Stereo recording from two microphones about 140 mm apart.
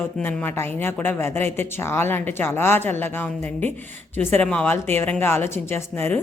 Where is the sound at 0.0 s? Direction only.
10° left (ahead or behind).